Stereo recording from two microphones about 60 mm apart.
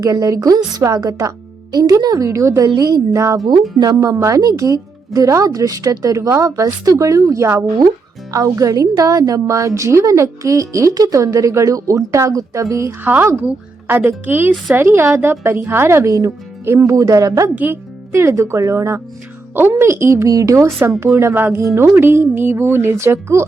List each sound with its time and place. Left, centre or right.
0.0 s speech: right
2.7 s a woman's voice: right
3.2 s speech: right
8.3 s speech: right
13.5 s a woman's voice: right
16.9 s speech: right
17.5 s speech: right
18.1 s a woman's voice: right
19.5 s a woman's voice: right
20.2 s speech: right
21.3 s a woman's voice: right